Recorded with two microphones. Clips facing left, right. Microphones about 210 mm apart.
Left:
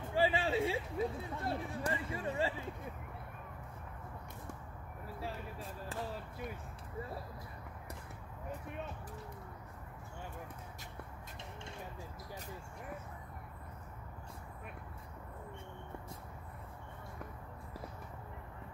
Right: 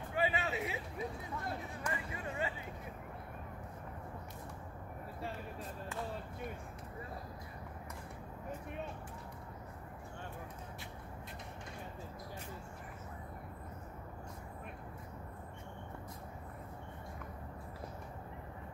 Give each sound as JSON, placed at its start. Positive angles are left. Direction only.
{"t": 0.1, "sound": "speech", "side_deg": 30}